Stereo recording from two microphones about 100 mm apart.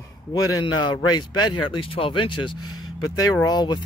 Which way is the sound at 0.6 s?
50° left (ahead or behind).